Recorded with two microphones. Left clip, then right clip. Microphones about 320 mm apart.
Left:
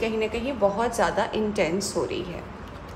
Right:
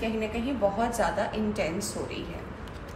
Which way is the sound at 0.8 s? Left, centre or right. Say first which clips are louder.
Left 3 dB; left.